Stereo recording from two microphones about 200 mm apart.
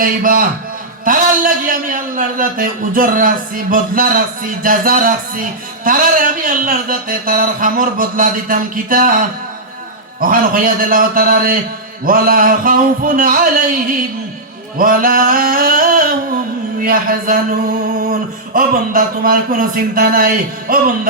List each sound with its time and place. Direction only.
0.0 s a man's voice: 45° right (ahead or behind)
14.8 s a man's voice: 45° right (ahead or behind)